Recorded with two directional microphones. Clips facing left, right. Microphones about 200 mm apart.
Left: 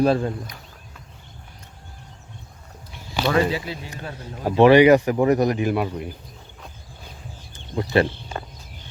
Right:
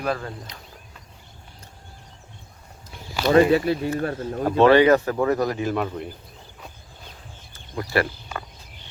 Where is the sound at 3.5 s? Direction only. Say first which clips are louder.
Right 8 dB; 55° right (ahead or behind).